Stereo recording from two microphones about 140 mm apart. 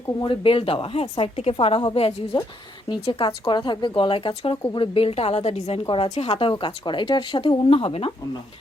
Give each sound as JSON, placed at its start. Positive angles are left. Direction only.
{"t": 0.2, "sound": "a woman's voice", "side_deg": 40}